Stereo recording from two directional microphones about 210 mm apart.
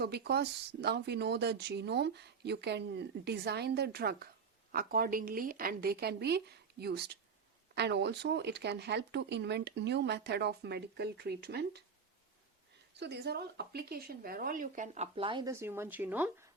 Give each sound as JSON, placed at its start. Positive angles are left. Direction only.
{"t": 0.0, "sound": "speech", "side_deg": -50}
{"t": 13.0, "sound": "speech", "side_deg": -55}